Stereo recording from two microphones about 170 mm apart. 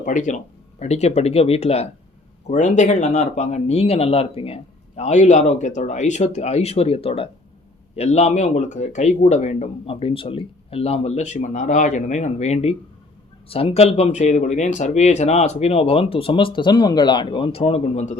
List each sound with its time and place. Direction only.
0.0 s speech: 45° left (ahead or behind)